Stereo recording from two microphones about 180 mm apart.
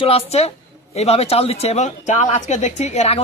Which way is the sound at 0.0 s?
35° left (ahead or behind).